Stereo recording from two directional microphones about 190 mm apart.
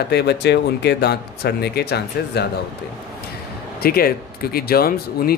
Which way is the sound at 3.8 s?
55° left (ahead or behind).